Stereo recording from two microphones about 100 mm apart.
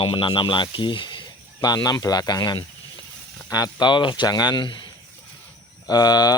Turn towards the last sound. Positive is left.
turn(degrees=40)  # may be behind; listen again after turning